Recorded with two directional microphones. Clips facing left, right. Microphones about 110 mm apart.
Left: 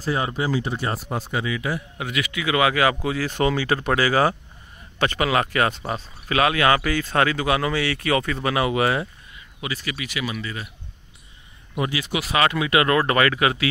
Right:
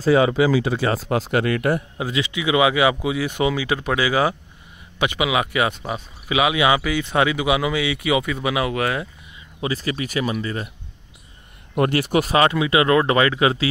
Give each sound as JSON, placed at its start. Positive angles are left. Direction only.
{"t": 0.1, "sound": "speech", "side_deg": -90}
{"t": 2.0, "sound": "speech", "side_deg": -25}
{"t": 9.6, "sound": "speech", "side_deg": -35}
{"t": 11.7, "sound": "speech", "side_deg": -55}
{"t": 12.4, "sound": "speech", "side_deg": -25}